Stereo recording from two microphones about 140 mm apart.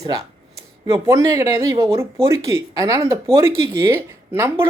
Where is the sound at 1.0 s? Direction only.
20° right (ahead or behind).